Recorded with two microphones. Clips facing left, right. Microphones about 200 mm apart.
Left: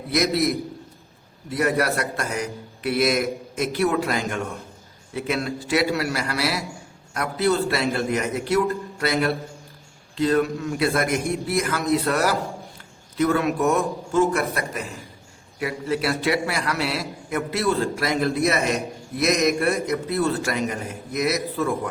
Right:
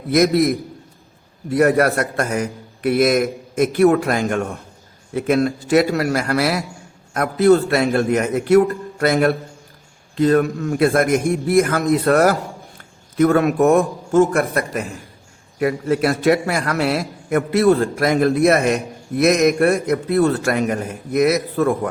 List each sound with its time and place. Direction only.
0.1 s a man's voice: 50° right (ahead or behind)